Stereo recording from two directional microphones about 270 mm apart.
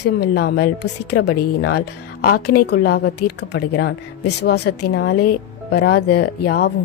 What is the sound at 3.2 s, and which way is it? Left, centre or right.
Speech, left.